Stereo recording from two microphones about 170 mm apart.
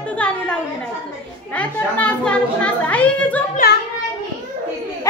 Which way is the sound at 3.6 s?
60° left (ahead or behind).